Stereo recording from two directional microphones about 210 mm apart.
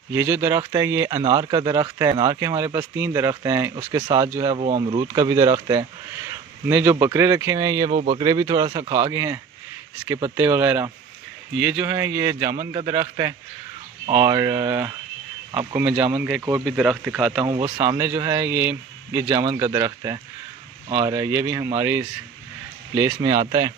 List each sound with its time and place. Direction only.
0.1 s speech: 10° right (ahead or behind); by 5.0 s 25° right (ahead or behind)
5.0 s speech: 15° right (ahead or behind)
17.5 s speech: 25° right (ahead or behind)
17.8 s speech: 10° right (ahead or behind)
23.2 s speech: 20° right (ahead or behind)